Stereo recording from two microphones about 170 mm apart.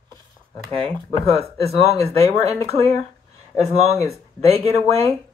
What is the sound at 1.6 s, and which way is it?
Speech, 35° right (ahead or behind).